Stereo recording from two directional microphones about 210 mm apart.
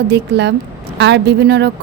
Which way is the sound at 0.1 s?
55° right (ahead or behind).